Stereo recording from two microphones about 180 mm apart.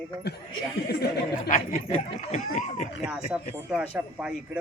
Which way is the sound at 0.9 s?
65° left (ahead or behind).